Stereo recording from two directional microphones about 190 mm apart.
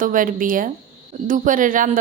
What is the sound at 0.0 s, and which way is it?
A woman's voice, 45° right (ahead or behind).